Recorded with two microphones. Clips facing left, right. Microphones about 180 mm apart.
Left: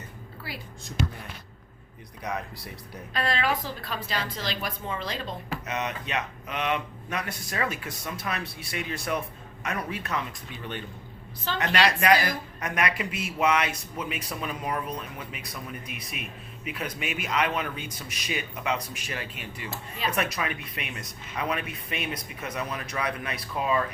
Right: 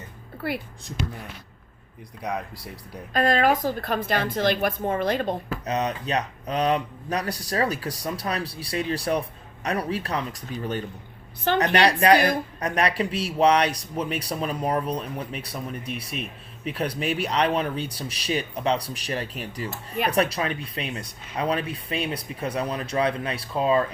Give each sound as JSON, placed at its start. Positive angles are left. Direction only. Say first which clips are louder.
{"t": 3.1, "sound": "a woman's voice", "louder": "right 7 dB", "side_deg": -45}
{"t": 5.6, "sound": "speech", "louder": "right 7 dB", "side_deg": -35}